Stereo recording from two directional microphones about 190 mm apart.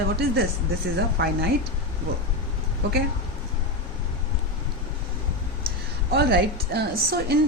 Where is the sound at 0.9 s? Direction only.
55° right (ahead or behind).